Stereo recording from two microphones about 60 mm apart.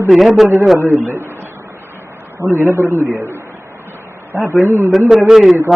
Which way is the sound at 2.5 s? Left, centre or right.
Right.